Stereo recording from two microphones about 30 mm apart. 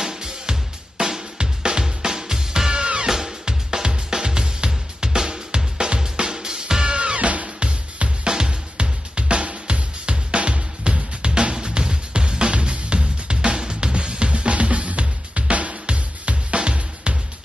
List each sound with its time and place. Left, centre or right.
0.0 s music: right
7.0 s music: right